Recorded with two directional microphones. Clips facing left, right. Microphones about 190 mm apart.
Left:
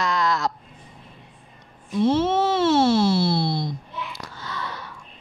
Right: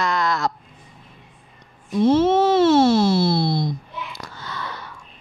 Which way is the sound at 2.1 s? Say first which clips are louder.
Right 5 dB; 45° right (ahead or behind).